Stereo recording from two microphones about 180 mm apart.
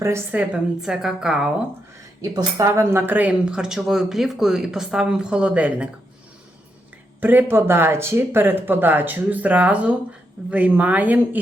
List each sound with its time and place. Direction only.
0.0 s a woman's voice: 10° right (ahead or behind)
2.2 s a woman's voice: 20° right (ahead or behind)
7.2 s speech: 10° right (ahead or behind)